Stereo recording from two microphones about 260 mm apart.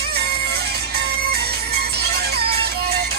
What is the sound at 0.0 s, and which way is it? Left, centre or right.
Music, right.